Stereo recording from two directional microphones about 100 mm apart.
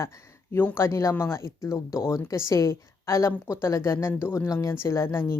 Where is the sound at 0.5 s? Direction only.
25° left (ahead or behind).